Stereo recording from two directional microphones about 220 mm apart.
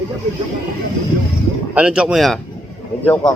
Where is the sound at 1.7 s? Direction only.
5° right (ahead or behind).